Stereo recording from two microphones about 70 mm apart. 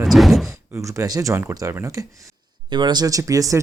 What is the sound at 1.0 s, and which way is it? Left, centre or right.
Speech, right.